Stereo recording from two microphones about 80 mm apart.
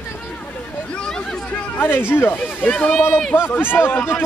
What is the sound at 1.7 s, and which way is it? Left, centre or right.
A man's voice, left.